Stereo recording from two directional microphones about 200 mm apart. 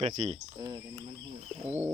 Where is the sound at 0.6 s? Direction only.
20° right (ahead or behind).